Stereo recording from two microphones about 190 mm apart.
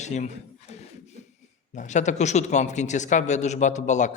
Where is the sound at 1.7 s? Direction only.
40° left (ahead or behind).